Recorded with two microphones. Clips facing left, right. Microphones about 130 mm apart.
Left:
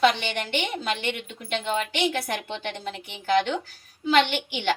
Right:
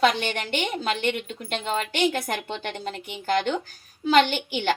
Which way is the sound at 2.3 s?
45° right (ahead or behind).